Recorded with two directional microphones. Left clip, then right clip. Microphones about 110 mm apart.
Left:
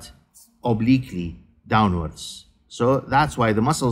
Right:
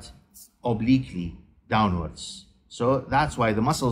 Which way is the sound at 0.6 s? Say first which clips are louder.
Left 3 dB; 45° left (ahead or behind).